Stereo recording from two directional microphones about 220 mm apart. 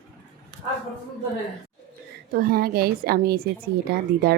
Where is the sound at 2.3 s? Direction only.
45° right (ahead or behind).